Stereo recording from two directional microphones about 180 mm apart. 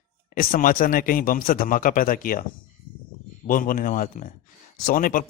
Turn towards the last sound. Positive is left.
turn(degrees=50)  # may be behind; listen again after turning